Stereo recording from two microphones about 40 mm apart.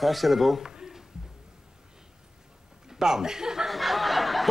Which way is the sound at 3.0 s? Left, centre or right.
Centre.